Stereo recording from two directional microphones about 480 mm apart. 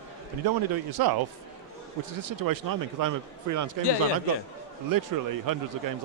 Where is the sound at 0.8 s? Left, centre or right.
Right.